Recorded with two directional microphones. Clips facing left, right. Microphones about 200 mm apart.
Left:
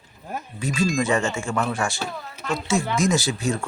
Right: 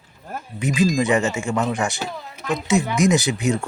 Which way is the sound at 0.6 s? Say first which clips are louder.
Right 4 dB; 20° right (ahead or behind).